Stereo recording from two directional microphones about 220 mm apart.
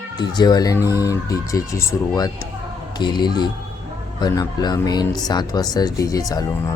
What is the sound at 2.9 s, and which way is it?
Speech, 20° left (ahead or behind).